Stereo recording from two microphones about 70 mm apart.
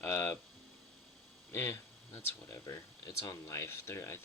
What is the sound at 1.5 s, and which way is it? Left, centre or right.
Speech, left.